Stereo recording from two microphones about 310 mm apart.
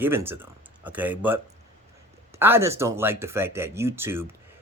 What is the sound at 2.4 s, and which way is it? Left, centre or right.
Speech, centre.